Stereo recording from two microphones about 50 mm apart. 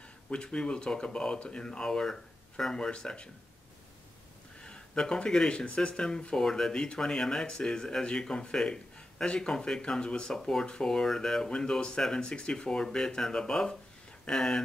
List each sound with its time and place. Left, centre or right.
0.3 s speech: centre
4.6 s speech: centre